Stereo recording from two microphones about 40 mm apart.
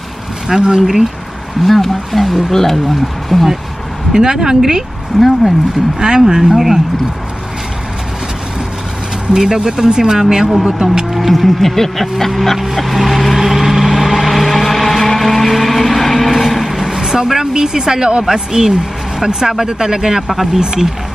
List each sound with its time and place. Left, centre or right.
0.5 s speech: right
1.6 s speech: centre
4.1 s speech: centre
5.1 s speech: centre
5.9 s speech: centre
6.5 s speech: centre
9.3 s speech: centre
11.1 s speech: centre
13.4 s vehicle: centre